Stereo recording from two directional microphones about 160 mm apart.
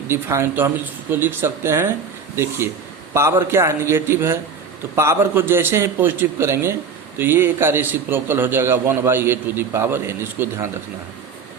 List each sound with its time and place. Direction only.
0.1 s a man's voice: 15° right (ahead or behind)